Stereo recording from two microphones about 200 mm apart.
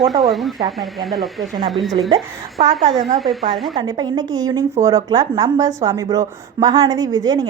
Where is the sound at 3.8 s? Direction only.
20° right (ahead or behind).